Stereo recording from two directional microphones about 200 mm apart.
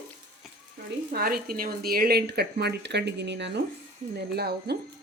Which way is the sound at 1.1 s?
50° right (ahead or behind).